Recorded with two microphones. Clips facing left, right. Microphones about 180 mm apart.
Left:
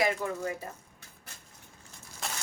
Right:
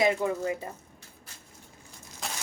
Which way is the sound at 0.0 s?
20° right (ahead or behind).